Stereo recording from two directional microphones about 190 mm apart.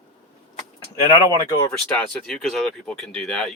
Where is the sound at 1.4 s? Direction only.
15° left (ahead or behind).